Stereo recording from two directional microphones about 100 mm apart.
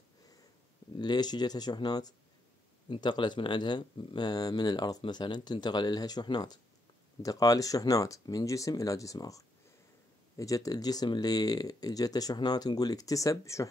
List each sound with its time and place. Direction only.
0.9 s speech: 45° left (ahead or behind)